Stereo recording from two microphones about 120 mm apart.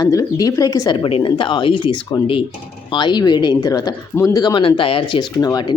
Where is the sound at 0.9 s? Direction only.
45° left (ahead or behind); by 4.4 s 25° left (ahead or behind).